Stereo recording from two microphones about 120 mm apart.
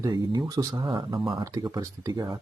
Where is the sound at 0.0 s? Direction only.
30° right (ahead or behind).